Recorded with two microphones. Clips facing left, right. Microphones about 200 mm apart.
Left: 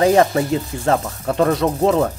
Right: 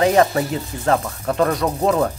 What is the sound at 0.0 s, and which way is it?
Speech, 30° left (ahead or behind).